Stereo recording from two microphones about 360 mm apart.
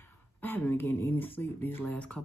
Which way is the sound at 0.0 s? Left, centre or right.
Centre.